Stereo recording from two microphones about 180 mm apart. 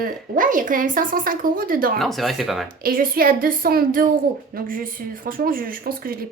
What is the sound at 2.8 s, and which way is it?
A woman's voice, 55° right (ahead or behind).